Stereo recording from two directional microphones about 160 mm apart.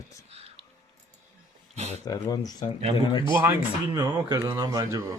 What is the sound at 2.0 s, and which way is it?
Speech, 25° left (ahead or behind).